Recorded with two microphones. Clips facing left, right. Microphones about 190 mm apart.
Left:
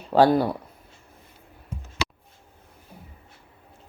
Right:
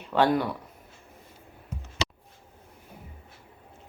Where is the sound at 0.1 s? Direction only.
35° left (ahead or behind).